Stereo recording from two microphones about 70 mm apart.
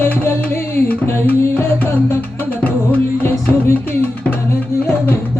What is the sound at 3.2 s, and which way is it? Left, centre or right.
Music, left.